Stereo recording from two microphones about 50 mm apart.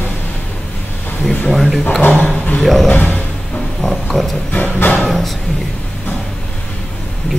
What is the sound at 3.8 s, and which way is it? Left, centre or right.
Speech, centre.